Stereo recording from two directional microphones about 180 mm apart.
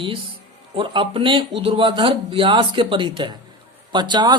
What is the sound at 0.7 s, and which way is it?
A man's voice, 30° right (ahead or behind).